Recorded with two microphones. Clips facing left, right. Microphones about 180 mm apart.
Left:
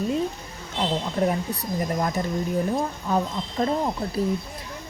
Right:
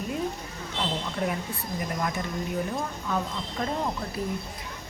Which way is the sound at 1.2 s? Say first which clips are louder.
Left 7 dB; 40° left (ahead or behind).